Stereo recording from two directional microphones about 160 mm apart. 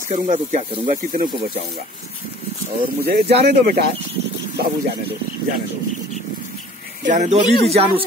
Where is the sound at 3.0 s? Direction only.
80° right.